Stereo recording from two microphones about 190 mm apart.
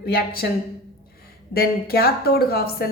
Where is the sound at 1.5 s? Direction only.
55° left (ahead or behind).